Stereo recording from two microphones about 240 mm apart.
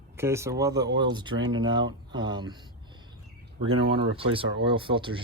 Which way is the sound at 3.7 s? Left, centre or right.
Right.